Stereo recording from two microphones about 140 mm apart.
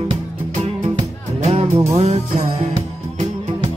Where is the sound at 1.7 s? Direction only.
20° right (ahead or behind).